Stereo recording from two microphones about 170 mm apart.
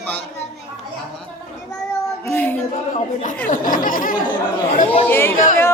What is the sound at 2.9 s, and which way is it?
A woman's voice, 50° left (ahead or behind).